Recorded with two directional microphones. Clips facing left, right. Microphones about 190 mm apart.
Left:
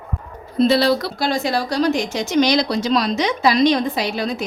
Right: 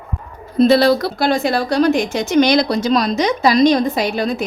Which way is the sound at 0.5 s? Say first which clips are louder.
Right 4 dB; 50° right (ahead or behind).